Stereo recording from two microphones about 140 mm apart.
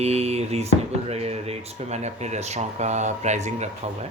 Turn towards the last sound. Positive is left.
turn(degrees=-55)  # may be behind; listen again after turning